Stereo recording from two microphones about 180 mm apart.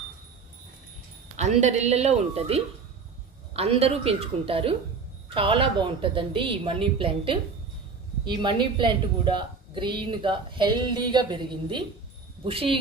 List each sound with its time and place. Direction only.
1.4 s a woman's voice: 40° right (ahead or behind)